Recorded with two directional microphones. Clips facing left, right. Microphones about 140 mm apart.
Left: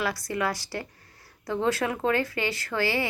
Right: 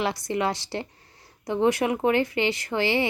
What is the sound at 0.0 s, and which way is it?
A woman's voice, 25° right (ahead or behind).